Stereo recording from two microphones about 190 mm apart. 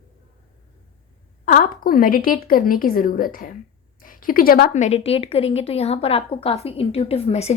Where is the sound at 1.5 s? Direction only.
45° left (ahead or behind).